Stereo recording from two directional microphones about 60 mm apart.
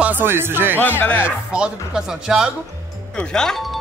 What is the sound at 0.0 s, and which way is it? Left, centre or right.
Speech, right.